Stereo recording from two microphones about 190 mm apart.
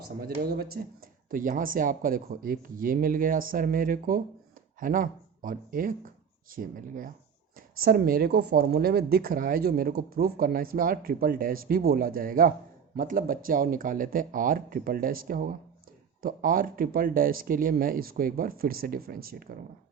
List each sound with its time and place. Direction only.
0.0 s speech: 50° right (ahead or behind)